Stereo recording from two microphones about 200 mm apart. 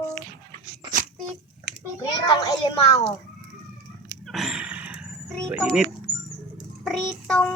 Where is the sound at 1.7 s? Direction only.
55° right (ahead or behind).